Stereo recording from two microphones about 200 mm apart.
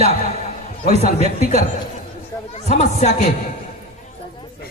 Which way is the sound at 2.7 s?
35° left (ahead or behind).